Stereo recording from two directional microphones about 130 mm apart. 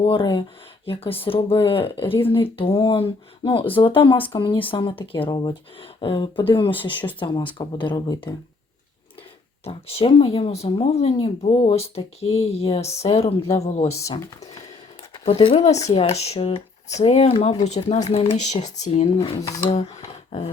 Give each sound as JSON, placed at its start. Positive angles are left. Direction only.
{"t": 0.0, "sound": "speech", "side_deg": 40}
{"t": 9.6, "sound": "speech", "side_deg": 50}
{"t": 15.3, "sound": "speech", "side_deg": 45}